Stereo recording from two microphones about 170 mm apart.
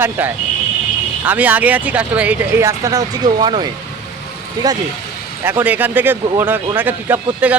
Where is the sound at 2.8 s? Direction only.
20° right (ahead or behind).